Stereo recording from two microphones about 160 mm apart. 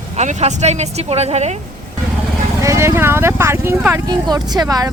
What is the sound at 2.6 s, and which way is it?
Speech, 20° right (ahead or behind).